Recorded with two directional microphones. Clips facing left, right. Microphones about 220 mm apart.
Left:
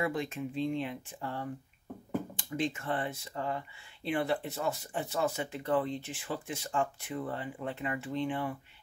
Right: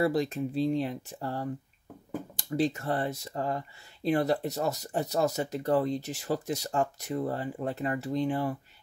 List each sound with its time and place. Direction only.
0.0 s speech: 35° right (ahead or behind)